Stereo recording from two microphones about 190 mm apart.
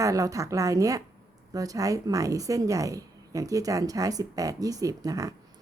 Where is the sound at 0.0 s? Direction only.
15° right (ahead or behind).